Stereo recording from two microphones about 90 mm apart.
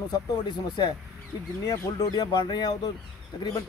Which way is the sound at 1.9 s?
50° left (ahead or behind).